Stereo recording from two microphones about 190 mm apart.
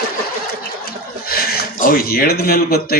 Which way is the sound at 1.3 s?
55° left (ahead or behind).